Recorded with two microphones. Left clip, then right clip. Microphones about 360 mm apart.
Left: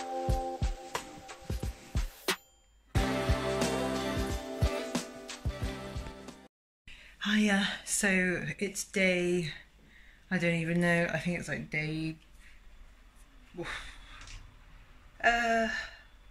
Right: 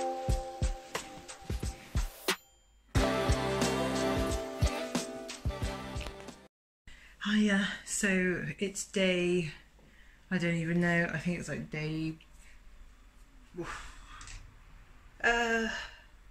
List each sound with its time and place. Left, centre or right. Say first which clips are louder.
0.0 s music: left 1 dB; centre
7.2 s speech: left 1 dB; centre
15.1 s a sound: left 2 dB; centre